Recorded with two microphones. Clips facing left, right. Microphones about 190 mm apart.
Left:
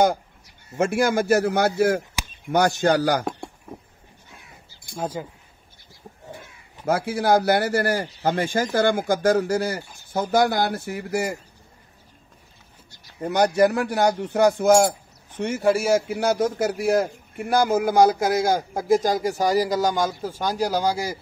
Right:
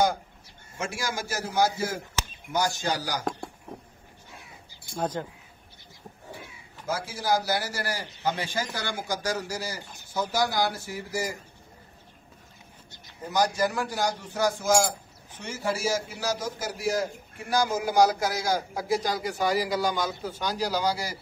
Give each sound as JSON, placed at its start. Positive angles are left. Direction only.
{"t": 0.7, "sound": "a man's voice", "side_deg": 55}
{"t": 4.9, "sound": "speech", "side_deg": 10}
{"t": 6.9, "sound": "a man's voice", "side_deg": 60}
{"t": 13.2, "sound": "a man's voice", "side_deg": 65}